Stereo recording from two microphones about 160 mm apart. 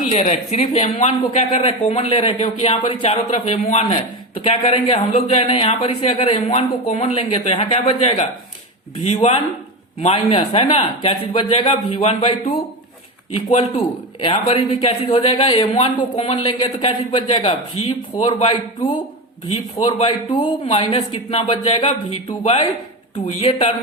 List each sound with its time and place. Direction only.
0.0 s speech: 45° left (ahead or behind)
13.5 s speech: 40° left (ahead or behind)